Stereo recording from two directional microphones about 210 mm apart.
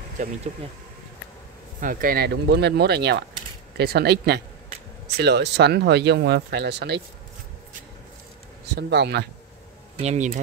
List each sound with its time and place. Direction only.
0.2 s speech: 35° right (ahead or behind)
1.8 s speech: 40° right (ahead or behind)
8.7 s speech: 55° right (ahead or behind)
10.0 s speech: 35° right (ahead or behind)